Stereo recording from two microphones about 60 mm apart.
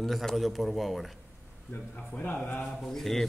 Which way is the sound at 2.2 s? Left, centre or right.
Left.